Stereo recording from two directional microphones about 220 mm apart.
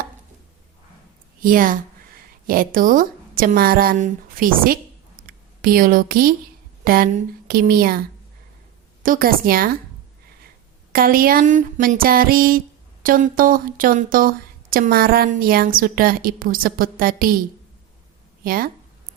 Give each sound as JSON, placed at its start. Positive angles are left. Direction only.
{"t": 1.4, "sound": "a woman's voice", "side_deg": -40}
{"t": 9.0, "sound": "speech", "side_deg": -40}
{"t": 10.9, "sound": "speech", "side_deg": -40}
{"t": 18.4, "sound": "speech", "side_deg": -40}